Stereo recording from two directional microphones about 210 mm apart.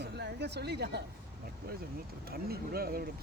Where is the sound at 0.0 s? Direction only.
50° right (ahead or behind).